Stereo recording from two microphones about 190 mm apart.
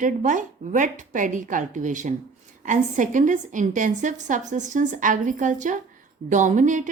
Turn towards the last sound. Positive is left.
turn(degrees=-40)  # may be behind; listen again after turning